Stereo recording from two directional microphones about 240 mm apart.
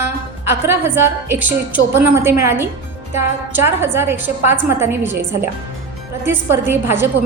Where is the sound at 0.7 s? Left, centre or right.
Centre.